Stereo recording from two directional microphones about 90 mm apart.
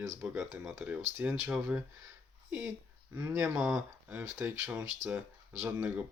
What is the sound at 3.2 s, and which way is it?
Speech, 25° right (ahead or behind).